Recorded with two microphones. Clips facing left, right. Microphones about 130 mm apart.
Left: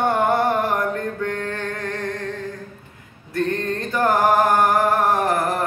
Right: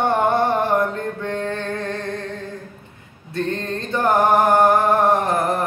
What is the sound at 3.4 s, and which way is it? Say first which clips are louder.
Music: left 1 dB; 25° right (ahead or behind).